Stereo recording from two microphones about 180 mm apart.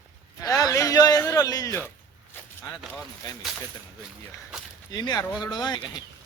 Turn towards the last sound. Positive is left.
turn(degrees=25)  # may be behind; listen again after turning